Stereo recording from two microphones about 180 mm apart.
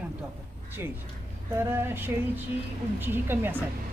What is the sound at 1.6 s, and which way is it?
A woman's voice, 15° right (ahead or behind).